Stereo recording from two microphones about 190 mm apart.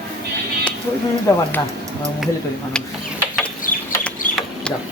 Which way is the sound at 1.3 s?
15° left (ahead or behind).